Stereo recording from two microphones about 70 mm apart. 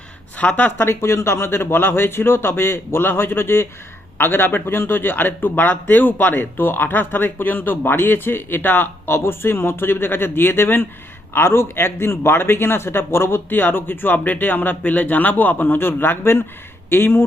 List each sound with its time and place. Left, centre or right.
0.3 s speech: left
0.9 s a man's voice: left